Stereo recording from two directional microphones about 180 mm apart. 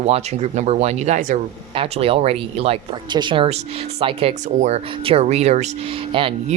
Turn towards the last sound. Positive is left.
turn(degrees=-30)  # may be behind; listen again after turning